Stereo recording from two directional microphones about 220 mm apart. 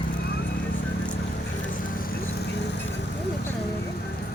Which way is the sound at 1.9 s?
40° left (ahead or behind).